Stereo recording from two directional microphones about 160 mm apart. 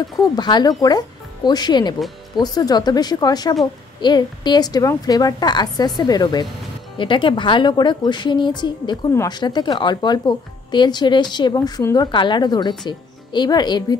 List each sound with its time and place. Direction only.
0.4 s a woman's voice: 25° left (ahead or behind)